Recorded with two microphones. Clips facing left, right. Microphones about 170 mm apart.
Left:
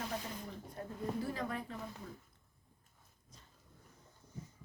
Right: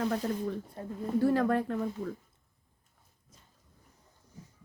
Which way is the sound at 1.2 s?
70° right (ahead or behind).